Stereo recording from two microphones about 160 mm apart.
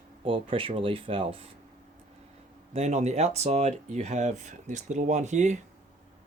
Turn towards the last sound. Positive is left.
turn(degrees=-50)  # may be behind; listen again after turning